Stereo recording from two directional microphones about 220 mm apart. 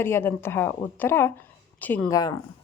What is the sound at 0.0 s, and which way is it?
A woman's voice, 10° left (ahead or behind).